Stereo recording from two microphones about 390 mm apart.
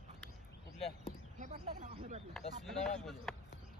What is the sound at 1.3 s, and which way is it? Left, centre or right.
Speech, centre.